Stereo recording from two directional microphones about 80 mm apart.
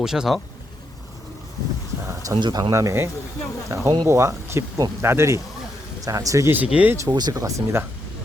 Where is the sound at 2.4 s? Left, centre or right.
Right.